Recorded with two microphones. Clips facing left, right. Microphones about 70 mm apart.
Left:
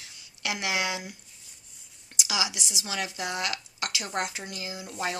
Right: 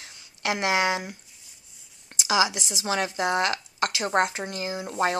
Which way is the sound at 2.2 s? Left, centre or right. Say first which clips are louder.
Right 8 dB; right.